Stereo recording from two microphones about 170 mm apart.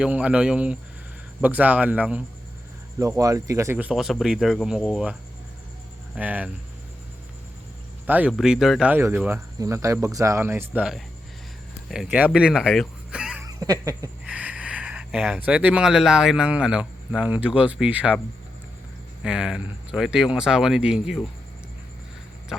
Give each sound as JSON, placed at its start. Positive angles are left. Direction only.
{"t": 0.0, "sound": "speech", "side_deg": -5}
{"t": 3.0, "sound": "speech", "side_deg": -20}
{"t": 6.1, "sound": "speech", "side_deg": -10}
{"t": 8.0, "sound": "speech", "side_deg": -10}
{"t": 12.1, "sound": "speech", "side_deg": -5}
{"t": 13.4, "sound": "a sound", "side_deg": -20}
{"t": 14.3, "sound": "speech", "side_deg": -5}
{"t": 19.2, "sound": "speech", "side_deg": -5}